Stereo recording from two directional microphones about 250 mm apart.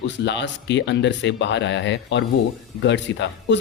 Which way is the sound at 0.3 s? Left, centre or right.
Left.